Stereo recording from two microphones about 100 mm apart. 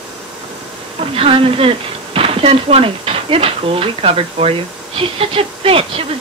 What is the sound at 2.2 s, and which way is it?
Speech, 70° right (ahead or behind).